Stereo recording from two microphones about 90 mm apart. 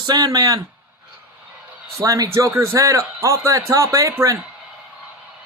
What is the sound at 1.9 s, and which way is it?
A man's voice, 35° right (ahead or behind).